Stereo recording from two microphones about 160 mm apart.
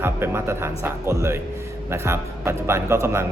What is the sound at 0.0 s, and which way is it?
A man's voice, 15° right (ahead or behind).